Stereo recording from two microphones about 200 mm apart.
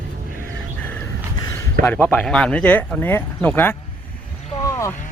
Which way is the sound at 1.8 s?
10° left (ahead or behind).